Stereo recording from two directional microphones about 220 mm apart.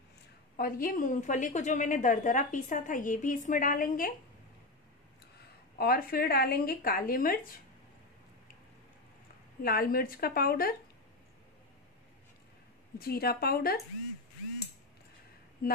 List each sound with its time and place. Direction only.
0.6 s a woman's voice: 40° left (ahead or behind)
5.8 s speech: 40° left (ahead or behind)
9.6 s speech: 45° left (ahead or behind)
13.0 s speech: 45° left (ahead or behind)
15.6 s speech: 45° left (ahead or behind)